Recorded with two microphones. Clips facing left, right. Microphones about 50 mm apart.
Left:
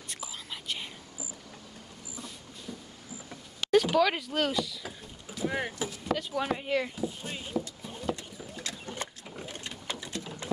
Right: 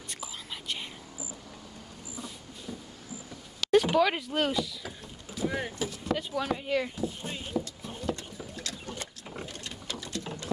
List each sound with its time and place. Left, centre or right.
0.1 s whispering: centre
3.8 s rowboat: centre
5.5 s vehicle: centre
6.1 s a sound: centre